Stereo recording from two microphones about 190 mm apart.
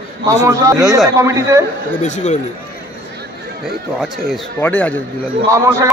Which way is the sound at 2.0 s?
40° left (ahead or behind).